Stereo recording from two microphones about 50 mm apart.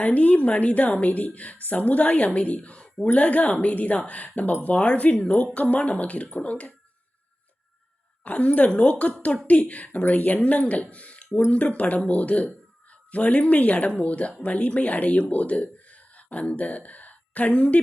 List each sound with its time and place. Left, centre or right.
0.0 s a woman's voice: left
8.2 s a woman's voice: left
10.9 s a sound: left
11.3 s a woman's voice: left